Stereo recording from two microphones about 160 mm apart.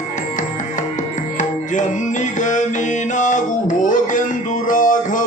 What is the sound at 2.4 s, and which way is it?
Mantra, 50° left (ahead or behind).